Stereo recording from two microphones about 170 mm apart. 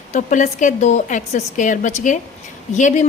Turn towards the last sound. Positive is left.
turn(degrees=45)  # may be behind; listen again after turning